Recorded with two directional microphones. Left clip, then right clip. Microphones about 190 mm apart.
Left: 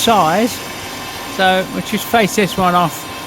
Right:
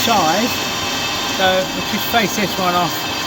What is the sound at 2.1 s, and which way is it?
Speech, 65° left (ahead or behind).